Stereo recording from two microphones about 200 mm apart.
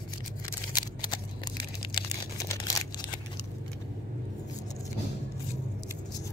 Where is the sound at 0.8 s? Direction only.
20° left (ahead or behind).